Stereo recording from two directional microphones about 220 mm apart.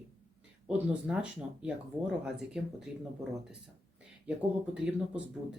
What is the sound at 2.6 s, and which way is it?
Speech, 5° right (ahead or behind).